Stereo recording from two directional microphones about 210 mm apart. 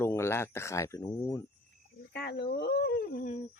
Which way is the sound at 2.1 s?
55° left (ahead or behind).